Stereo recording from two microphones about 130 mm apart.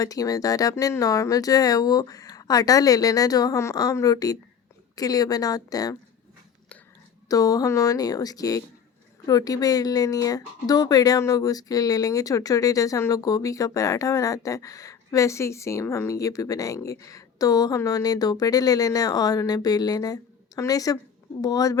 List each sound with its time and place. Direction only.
0.0 s speech: 25° left (ahead or behind)
7.3 s speech: 25° left (ahead or behind)